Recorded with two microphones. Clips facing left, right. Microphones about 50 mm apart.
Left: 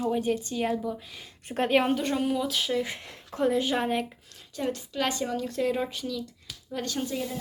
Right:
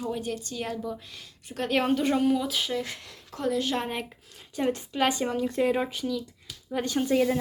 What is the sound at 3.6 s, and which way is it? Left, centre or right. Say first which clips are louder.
Speech: left 2 dB; centre.